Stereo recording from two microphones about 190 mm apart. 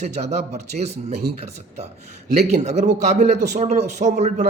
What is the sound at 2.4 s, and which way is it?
A man's voice, 35° right (ahead or behind).